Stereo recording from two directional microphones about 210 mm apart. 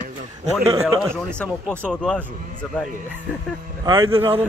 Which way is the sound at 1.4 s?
5° left (ahead or behind).